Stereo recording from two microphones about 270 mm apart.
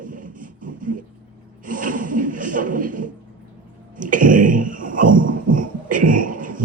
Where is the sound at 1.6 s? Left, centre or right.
Right.